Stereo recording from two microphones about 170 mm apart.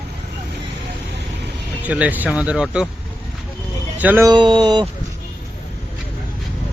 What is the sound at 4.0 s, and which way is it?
Speech, 10° right (ahead or behind).